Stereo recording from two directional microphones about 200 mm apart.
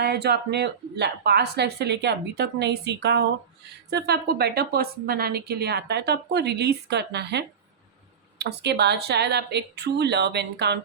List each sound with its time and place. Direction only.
0.0 s a woman's voice: 55° right (ahead or behind)